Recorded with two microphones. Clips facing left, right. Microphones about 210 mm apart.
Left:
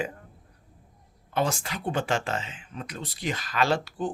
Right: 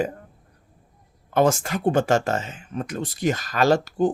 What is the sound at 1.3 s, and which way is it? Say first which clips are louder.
Speech: right 8 dB; 50° right (ahead or behind).